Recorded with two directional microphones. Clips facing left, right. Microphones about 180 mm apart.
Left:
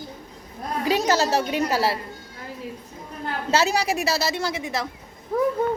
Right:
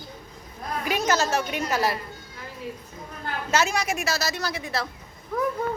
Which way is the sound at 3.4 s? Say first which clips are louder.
Left 3 dB; 30° left (ahead or behind).